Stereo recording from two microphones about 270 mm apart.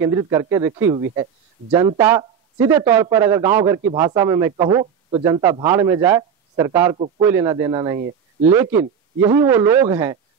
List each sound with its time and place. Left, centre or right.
0.0 s speech: centre